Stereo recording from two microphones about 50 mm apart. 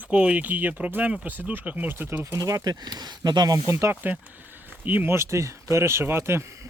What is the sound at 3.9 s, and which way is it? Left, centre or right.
Speech, right.